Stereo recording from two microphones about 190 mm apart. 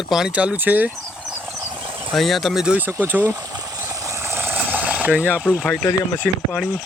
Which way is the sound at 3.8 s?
15° right (ahead or behind).